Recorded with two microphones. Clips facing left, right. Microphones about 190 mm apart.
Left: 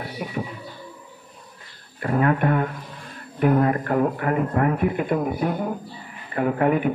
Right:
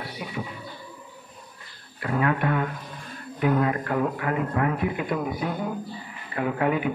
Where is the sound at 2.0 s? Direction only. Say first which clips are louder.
Left 4 dB; 45° left (ahead or behind).